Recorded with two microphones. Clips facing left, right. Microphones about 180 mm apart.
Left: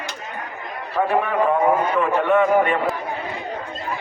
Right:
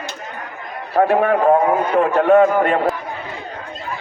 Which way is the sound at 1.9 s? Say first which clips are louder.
Right 5 dB; 45° right (ahead or behind).